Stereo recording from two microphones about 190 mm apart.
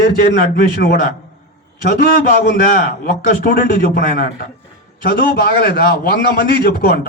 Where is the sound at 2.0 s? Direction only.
55° left (ahead or behind).